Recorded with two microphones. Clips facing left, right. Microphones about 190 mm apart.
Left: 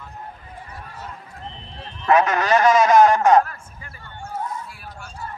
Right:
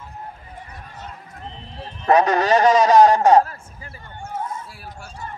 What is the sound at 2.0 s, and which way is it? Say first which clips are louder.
A man's voice: right 2 dB; 35° right (ahead or behind).